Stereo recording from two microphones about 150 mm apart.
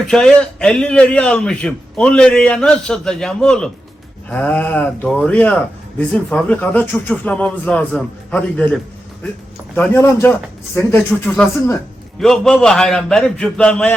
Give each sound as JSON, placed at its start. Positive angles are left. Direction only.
{"t": 0.1, "sound": "a man's voice", "side_deg": 5}